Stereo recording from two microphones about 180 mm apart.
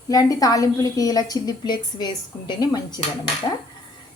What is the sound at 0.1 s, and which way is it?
A woman's voice, 20° left (ahead or behind).